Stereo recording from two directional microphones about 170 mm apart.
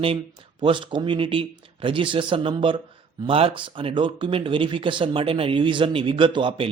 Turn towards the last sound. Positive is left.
turn(degrees=-30)  # may be behind; listen again after turning